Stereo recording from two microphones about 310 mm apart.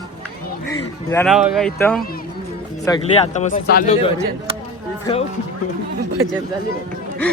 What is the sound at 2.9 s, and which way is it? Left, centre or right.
Speech, centre.